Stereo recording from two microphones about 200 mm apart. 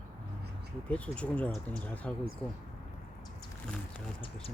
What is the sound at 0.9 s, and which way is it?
Speech, 5° left (ahead or behind).